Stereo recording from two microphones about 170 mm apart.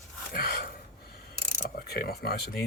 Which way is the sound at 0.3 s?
60° left (ahead or behind).